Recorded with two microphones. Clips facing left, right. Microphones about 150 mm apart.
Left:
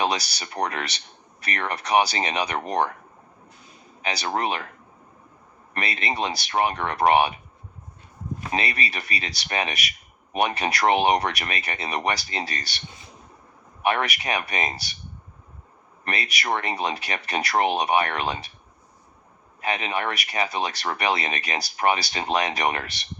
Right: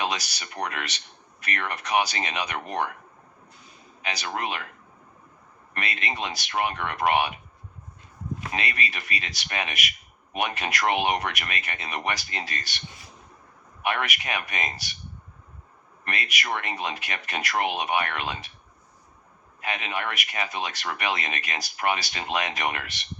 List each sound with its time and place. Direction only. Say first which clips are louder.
0.0 s speech: left 4 dB; 35° left (ahead or behind)
4.0 s speech: left 5 dB; 35° left (ahead or behind)
5.7 s speech: left 4 dB; 35° left (ahead or behind)
8.5 s speech: left 4 dB; 35° left (ahead or behind)
13.8 s speech: left 4 dB; 35° left (ahead or behind)
16.0 s speech: left 3 dB; 35° left (ahead or behind)
19.6 s speech: left 4 dB; 35° left (ahead or behind)